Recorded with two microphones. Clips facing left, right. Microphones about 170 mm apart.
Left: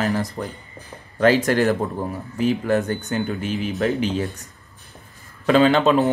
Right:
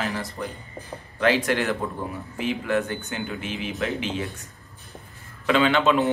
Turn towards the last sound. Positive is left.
turn(degrees=40)  # may be behind; listen again after turning